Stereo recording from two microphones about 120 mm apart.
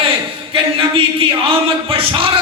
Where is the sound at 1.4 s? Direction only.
50° right (ahead or behind).